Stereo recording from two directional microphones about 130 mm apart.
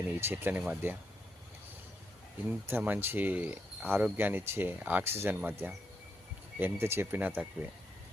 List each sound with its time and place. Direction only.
0.1 s speech: 15° right (ahead or behind)
2.5 s speech: 15° right (ahead or behind)